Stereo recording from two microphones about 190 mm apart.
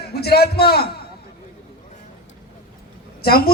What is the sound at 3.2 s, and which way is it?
Speech, 55° left (ahead or behind).